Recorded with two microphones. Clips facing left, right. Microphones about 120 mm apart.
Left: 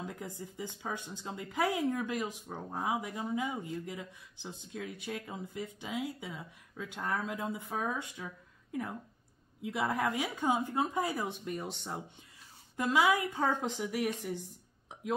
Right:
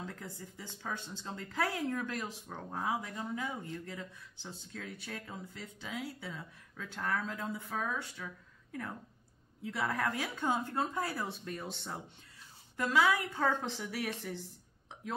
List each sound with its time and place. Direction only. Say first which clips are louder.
0.0 s speech: left 3 dB; 15° left (ahead or behind)
9.6 s speech: left 2 dB; 15° left (ahead or behind)